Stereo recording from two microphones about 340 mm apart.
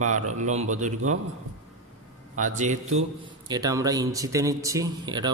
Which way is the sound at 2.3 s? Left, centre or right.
Right.